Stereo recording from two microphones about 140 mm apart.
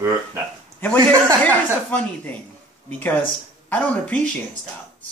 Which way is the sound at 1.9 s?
10° left (ahead or behind).